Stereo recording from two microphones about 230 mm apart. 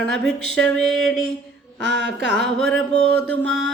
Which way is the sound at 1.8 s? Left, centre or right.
Right.